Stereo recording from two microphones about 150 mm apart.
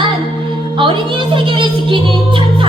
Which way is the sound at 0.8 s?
35° right (ahead or behind).